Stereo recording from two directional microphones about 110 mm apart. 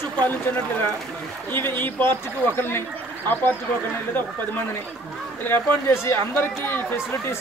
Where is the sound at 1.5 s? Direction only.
20° left (ahead or behind).